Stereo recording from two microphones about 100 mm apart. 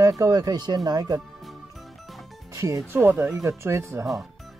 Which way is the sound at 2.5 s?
30° right (ahead or behind).